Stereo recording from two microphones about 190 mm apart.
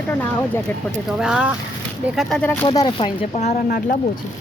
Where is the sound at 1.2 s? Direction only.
5° right (ahead or behind).